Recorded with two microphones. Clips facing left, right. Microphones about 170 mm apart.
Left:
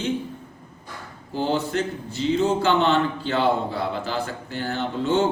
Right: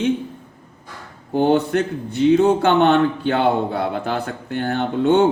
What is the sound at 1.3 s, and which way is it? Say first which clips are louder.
A man's voice: right 7 dB; 60° right (ahead or behind).